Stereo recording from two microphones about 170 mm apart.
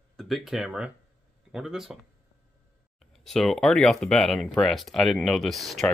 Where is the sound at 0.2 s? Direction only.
Centre (ahead or behind).